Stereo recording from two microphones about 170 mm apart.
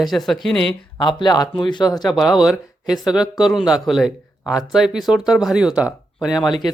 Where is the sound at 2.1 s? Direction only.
Centre (ahead or behind).